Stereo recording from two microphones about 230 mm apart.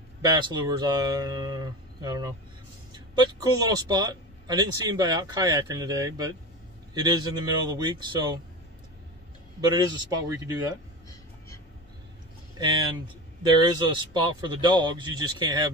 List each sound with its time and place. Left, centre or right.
0.2 s a man's voice: centre
9.7 s a man's voice: centre
11.1 s a sound: centre
12.5 s speech: centre